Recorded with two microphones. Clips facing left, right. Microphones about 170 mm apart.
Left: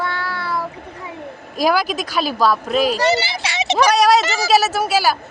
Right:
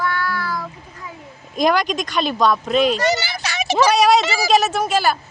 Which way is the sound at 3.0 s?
30° left (ahead or behind).